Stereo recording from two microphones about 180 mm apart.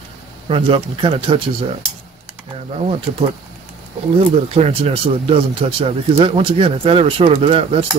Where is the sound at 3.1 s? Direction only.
40° right (ahead or behind).